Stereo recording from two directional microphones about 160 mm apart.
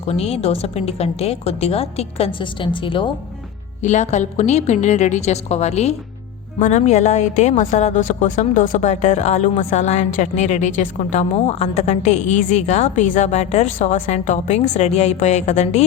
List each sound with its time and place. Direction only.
0.0 s a woman's voice: 40° left (ahead or behind)
3.8 s a woman's voice: 45° left (ahead or behind)